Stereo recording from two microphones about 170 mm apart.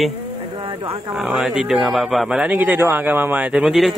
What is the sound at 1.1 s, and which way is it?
Speech, centre (ahead or behind).